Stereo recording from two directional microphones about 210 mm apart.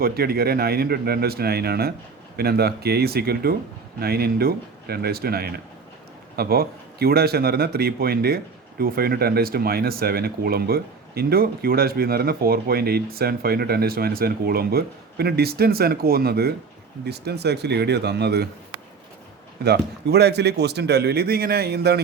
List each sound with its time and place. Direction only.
0.0 s speech: 45° right (ahead or behind)
19.6 s speech: 50° right (ahead or behind)